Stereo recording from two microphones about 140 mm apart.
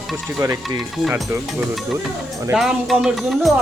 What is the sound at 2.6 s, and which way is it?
Speech, centre (ahead or behind).